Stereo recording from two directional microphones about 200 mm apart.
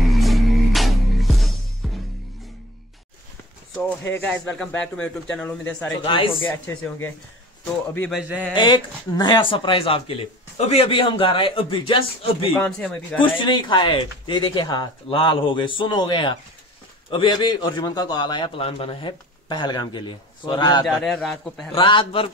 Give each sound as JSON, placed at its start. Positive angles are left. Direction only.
{"t": 0.0, "sound": "music", "side_deg": 0}
{"t": 3.7, "sound": "speech", "side_deg": 5}
{"t": 6.0, "sound": "speech", "side_deg": 25}
{"t": 6.4, "sound": "speech", "side_deg": 10}
{"t": 8.2, "sound": "a man's voice", "side_deg": -10}
{"t": 8.5, "sound": "speech", "side_deg": 25}
{"t": 12.5, "sound": "speech", "side_deg": 5}
{"t": 13.2, "sound": "speech", "side_deg": 25}
{"t": 20.8, "sound": "speech", "side_deg": 0}
{"t": 21.7, "sound": "speech", "side_deg": 25}